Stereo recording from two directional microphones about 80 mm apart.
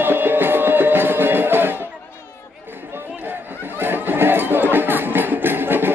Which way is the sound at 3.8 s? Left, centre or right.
Right.